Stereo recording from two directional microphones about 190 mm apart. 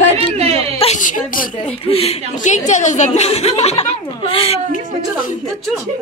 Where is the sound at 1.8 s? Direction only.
30° left (ahead or behind).